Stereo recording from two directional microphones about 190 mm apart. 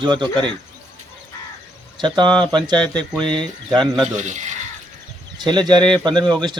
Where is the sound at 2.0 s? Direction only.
25° right (ahead or behind).